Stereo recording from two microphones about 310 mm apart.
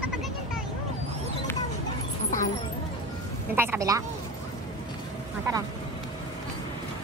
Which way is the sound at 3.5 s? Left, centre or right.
Centre.